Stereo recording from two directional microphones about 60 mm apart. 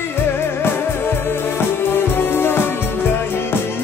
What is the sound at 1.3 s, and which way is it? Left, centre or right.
Music, left.